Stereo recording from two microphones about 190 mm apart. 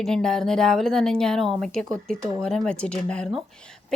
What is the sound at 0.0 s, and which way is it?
A woman's voice, 5° left (ahead or behind).